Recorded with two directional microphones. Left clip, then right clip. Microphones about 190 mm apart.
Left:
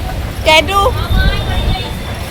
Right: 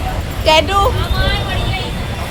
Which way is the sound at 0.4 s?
5° left (ahead or behind).